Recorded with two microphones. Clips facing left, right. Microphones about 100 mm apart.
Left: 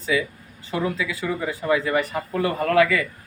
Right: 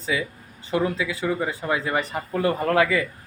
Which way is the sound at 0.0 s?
25° right (ahead or behind).